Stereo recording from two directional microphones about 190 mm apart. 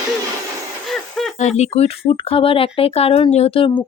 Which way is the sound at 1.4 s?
35° left (ahead or behind).